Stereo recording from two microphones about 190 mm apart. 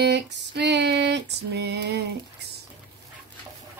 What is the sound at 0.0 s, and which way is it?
Female singing, 65° right (ahead or behind).